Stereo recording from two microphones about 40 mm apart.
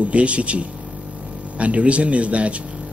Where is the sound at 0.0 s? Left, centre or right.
Right.